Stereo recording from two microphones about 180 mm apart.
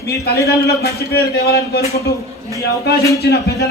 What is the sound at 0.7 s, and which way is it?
A man's voice, 60° left (ahead or behind).